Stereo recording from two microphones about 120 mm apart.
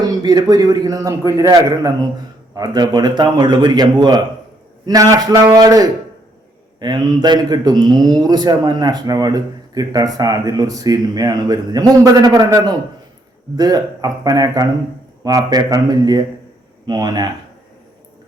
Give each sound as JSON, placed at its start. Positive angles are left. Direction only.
{"t": 0.0, "sound": "a man's voice", "side_deg": -35}